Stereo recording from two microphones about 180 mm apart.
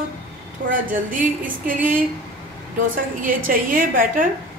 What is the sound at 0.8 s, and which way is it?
A woman's voice, 50° right (ahead or behind).